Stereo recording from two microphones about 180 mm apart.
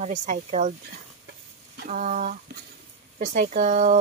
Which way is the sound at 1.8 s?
50° right (ahead or behind).